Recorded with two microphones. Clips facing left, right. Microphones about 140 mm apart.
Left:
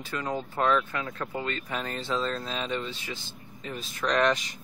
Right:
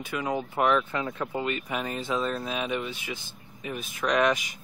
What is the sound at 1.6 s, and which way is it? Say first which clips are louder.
Speech: right 2 dB; 5° right (ahead or behind).